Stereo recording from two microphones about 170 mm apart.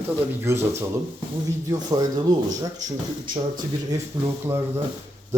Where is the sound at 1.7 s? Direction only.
25° right (ahead or behind).